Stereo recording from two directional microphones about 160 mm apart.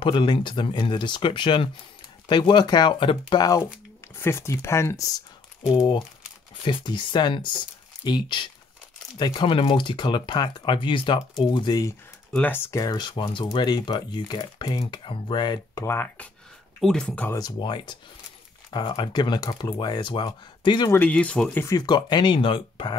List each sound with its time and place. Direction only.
0.0 s speech: 30° left (ahead or behind)
5.7 s speech: 35° left (ahead or behind)
12.3 s speech: 10° left (ahead or behind)
17.4 s speech: 30° left (ahead or behind)
20.9 s speech: 10° left (ahead or behind)
21.6 s speech: 25° left (ahead or behind)